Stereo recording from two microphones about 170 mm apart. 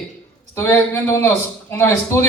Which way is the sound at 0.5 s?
15° left (ahead or behind).